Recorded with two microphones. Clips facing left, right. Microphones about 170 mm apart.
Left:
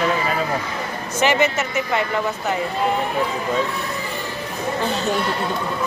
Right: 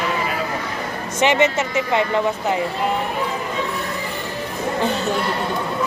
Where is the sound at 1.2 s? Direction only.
25° right (ahead or behind).